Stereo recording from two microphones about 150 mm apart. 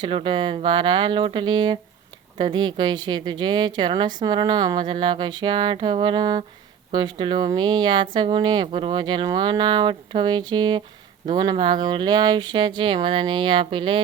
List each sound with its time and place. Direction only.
0.0 s speech: 35° right (ahead or behind)